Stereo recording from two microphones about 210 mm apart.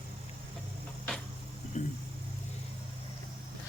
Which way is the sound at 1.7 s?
35° left (ahead or behind).